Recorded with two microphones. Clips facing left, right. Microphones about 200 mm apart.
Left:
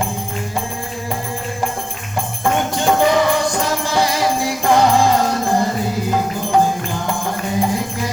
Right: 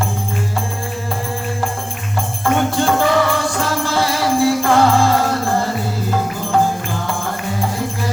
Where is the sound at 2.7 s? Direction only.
15° left (ahead or behind).